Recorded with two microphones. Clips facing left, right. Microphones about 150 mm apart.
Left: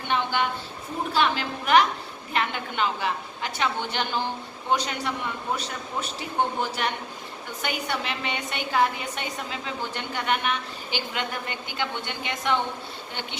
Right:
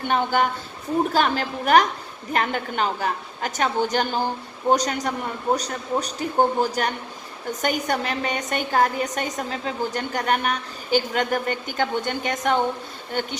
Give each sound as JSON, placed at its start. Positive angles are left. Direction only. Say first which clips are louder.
{"t": 0.1, "sound": "a woman's voice", "louder": "right 4 dB", "side_deg": -45}